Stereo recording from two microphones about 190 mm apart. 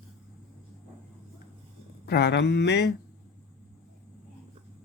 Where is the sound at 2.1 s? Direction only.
60° left (ahead or behind).